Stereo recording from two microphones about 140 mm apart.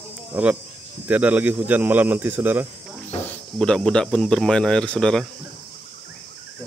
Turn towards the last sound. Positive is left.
turn(degrees=5)  # may be behind; listen again after turning